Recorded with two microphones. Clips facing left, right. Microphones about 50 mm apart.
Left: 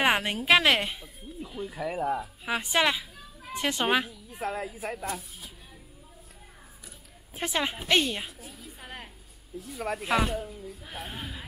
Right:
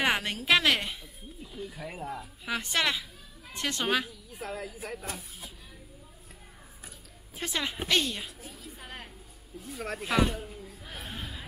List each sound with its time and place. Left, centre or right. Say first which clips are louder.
0.0 s speech: left 3 dB; centre
4.3 s speech: left 5 dB; left
7.3 s a woman's voice: left 3 dB; centre
9.7 s speech: left 3 dB; centre
10.0 s a woman's voice: even; left
10.9 s a sound: left 1 dB; centre